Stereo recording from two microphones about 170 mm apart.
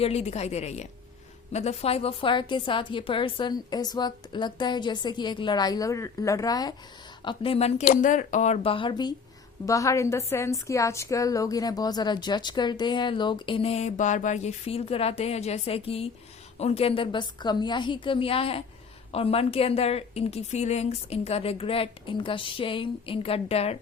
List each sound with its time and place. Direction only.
0.0 s a woman's voice: 40° left (ahead or behind); by 6.7 s 20° left (ahead or behind)
7.3 s a woman's voice: 35° left (ahead or behind)
7.9 s a woman's voice: 50° left (ahead or behind)